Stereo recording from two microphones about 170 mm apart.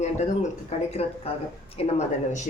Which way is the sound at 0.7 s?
35° left (ahead or behind).